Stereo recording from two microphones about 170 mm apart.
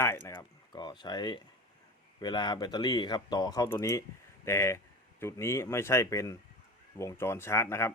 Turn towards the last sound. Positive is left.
turn(degrees=15)  # may be behind; listen again after turning